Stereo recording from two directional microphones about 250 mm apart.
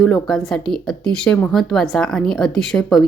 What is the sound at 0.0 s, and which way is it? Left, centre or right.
Speech, centre.